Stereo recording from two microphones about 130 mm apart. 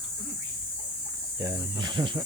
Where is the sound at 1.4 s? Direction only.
30° right (ahead or behind).